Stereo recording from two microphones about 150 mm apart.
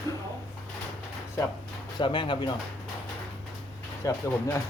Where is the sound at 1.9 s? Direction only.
30° left (ahead or behind).